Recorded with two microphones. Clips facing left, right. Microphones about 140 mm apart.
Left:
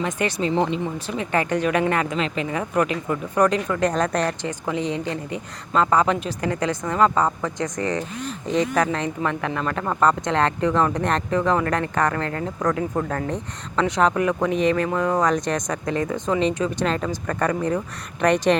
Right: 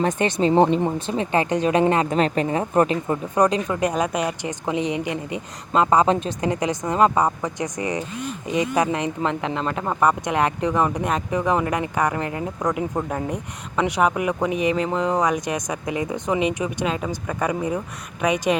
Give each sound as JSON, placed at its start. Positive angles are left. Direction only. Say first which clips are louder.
{"t": 0.2, "sound": "speech", "louder": "right 3 dB", "side_deg": -25}
{"t": 0.5, "sound": "speech", "louder": "right 5 dB", "side_deg": -45}
{"t": 0.9, "sound": "speech", "louder": "right 2 dB", "side_deg": -25}
{"t": 2.1, "sound": "speech", "louder": "right 5 dB", "side_deg": -45}
{"t": 2.5, "sound": "a woman's voice", "louder": "right 3 dB", "side_deg": -30}
{"t": 3.3, "sound": "speech", "louder": "even", "side_deg": -20}